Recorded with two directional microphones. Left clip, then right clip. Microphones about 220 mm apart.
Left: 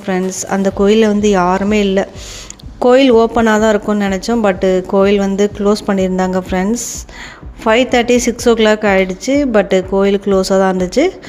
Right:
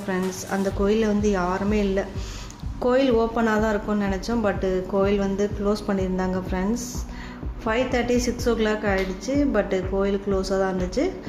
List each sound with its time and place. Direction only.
0.1 s speech: 35° left (ahead or behind)